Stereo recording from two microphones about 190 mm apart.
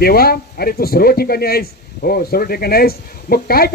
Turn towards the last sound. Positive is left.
turn(degrees=50)  # may be behind; listen again after turning